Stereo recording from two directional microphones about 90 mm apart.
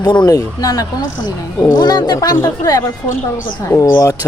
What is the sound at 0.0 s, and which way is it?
Speech, 60° left (ahead or behind).